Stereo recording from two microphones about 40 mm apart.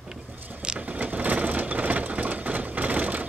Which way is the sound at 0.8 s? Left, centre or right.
Right.